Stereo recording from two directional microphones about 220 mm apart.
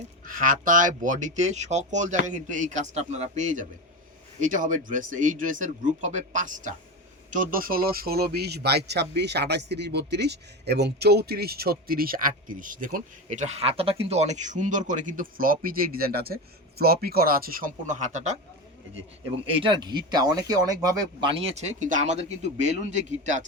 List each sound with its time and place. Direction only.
0.3 s a man's voice: 35° right (ahead or behind)
19.6 s speech: 20° right (ahead or behind)